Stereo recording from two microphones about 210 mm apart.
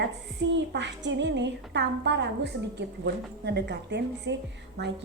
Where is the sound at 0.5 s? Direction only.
55° right (ahead or behind).